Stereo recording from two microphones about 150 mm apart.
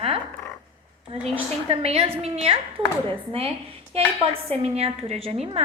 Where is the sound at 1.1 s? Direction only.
40° right (ahead or behind).